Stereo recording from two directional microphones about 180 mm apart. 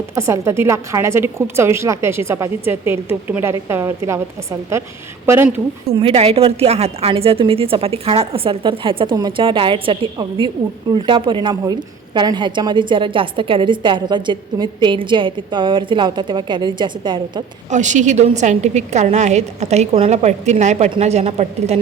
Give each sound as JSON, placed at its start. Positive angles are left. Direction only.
{"t": 0.2, "sound": "a woman's voice", "side_deg": -15}
{"t": 6.0, "sound": "a woman's voice", "side_deg": -35}
{"t": 17.7, "sound": "a woman's voice", "side_deg": -40}